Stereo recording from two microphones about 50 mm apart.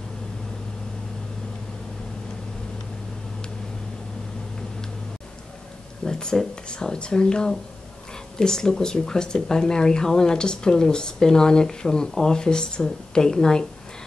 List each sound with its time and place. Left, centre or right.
6.0 s speech: centre